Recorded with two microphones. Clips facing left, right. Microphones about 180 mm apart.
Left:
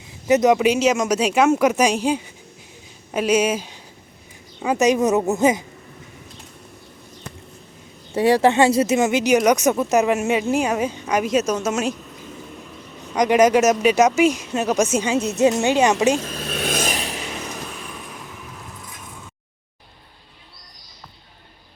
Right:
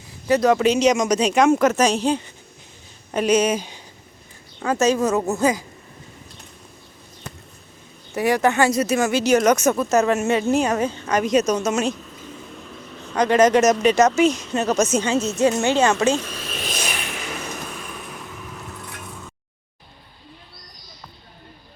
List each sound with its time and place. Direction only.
0.3 s speech: 20° left (ahead or behind); by 3.8 s 5° left (ahead or behind)
4.6 s speech: 15° left (ahead or behind)
8.1 s speech: 30° left (ahead or behind); by 11.9 s 5° left (ahead or behind)
13.1 s speech: 15° left (ahead or behind)
16.2 s speech: 40° left (ahead or behind)
16.5 s vehicle: 60° left (ahead or behind); by 17.2 s 35° left (ahead or behind)